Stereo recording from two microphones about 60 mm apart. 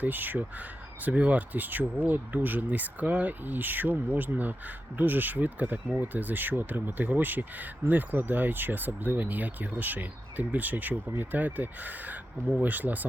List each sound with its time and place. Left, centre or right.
0.0 s speech: right